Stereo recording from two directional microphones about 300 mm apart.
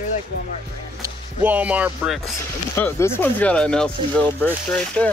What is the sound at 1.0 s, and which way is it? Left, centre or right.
Speech, centre.